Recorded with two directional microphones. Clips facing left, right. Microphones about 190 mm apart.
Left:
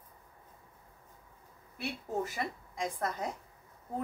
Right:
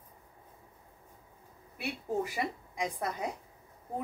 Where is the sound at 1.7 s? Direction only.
15° right (ahead or behind).